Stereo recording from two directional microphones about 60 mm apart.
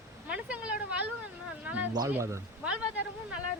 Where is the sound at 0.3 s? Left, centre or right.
Centre.